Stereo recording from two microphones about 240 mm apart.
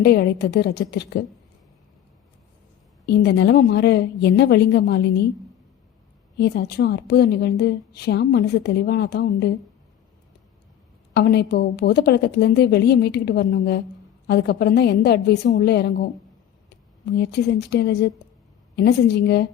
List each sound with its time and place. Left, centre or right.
0.0 s a woman's voice: left
3.1 s a woman's voice: left
6.4 s a woman's voice: left
11.1 s a woman's voice: left
17.1 s a woman's voice: left